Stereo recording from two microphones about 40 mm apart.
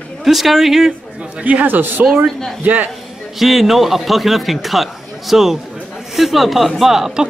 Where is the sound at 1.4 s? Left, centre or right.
Right.